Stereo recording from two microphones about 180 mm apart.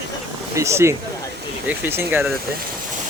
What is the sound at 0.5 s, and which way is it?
Speech, 15° right (ahead or behind).